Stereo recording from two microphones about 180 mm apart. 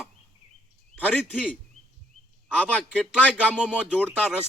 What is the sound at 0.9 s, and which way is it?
Speech, 10° left (ahead or behind).